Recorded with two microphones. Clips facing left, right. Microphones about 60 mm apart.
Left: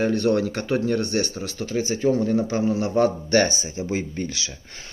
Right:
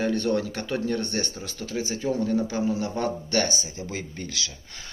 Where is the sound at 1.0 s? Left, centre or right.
Left.